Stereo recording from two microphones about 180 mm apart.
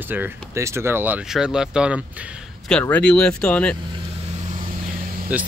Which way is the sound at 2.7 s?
5° left (ahead or behind).